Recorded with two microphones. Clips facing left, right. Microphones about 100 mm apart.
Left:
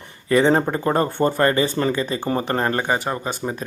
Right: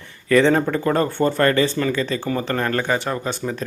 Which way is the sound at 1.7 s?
30° left (ahead or behind).